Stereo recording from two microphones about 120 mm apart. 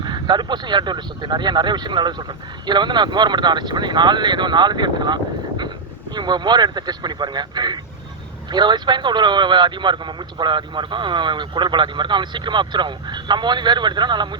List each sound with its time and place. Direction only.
0.0 s speech: 40° right (ahead or behind)